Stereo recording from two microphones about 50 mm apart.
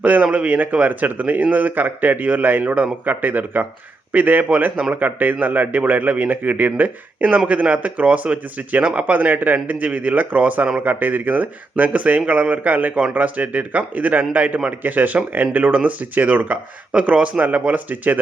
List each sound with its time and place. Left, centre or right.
0.0 s a man's voice: right